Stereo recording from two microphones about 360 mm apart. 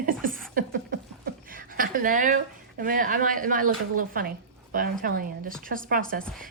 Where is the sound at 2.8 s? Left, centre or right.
Right.